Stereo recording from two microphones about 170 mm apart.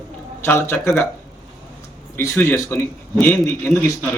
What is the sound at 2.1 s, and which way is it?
A man's voice, 15° left (ahead or behind).